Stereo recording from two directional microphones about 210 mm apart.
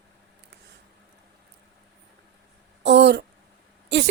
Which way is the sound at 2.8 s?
55° right (ahead or behind).